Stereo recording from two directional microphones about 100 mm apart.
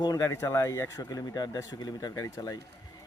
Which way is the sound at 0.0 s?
35° left (ahead or behind).